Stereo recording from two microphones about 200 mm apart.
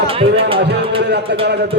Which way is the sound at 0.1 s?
30° right (ahead or behind).